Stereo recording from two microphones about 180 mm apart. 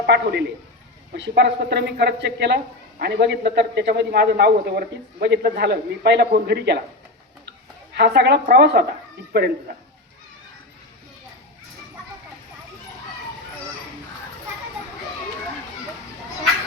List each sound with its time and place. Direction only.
0.0 s a man's voice: 65° right (ahead or behind)
7.9 s a woman's voice: 65° right (ahead or behind)